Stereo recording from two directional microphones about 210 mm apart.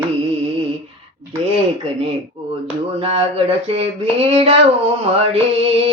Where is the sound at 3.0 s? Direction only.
30° right (ahead or behind).